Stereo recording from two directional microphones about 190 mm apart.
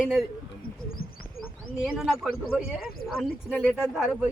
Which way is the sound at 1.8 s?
Centre (ahead or behind).